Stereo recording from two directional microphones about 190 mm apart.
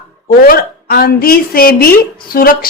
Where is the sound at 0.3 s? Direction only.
50° left (ahead or behind).